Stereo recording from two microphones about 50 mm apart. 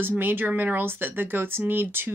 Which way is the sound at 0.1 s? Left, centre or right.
Right.